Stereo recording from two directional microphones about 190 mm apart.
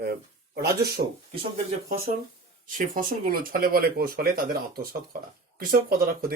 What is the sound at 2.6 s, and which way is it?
Speech, 45° right (ahead or behind).